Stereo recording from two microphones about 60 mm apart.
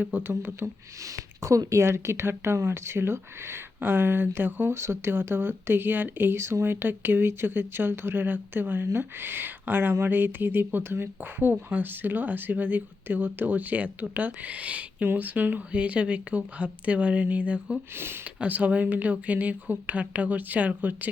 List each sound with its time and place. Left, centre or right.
0.2 s speech: right
0.6 s speech: right
1.8 s speech: right
15.7 s speech: centre
17.9 s speech: right
18.4 s speech: right